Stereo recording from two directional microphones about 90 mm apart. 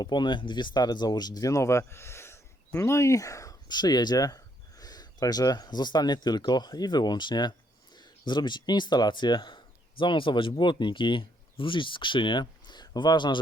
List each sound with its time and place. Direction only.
0.0 s speech: 55° left (ahead or behind); by 3.6 s 40° left (ahead or behind)
3.7 s speech: 50° left (ahead or behind)
10.0 s speech: 65° left (ahead or behind)